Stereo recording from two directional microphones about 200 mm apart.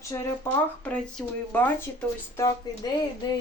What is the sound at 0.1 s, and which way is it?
Speech, 10° left (ahead or behind).